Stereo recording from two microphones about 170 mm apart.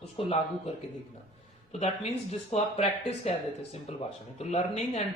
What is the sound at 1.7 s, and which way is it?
Speech, 40° left (ahead or behind).